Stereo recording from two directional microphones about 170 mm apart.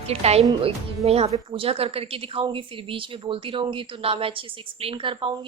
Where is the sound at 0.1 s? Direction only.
35° right (ahead or behind).